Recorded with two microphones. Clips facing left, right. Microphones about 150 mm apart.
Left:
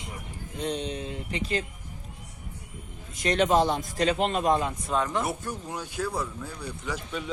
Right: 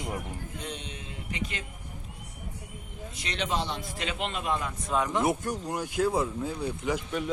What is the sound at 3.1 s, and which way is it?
A man's voice, 45° left (ahead or behind).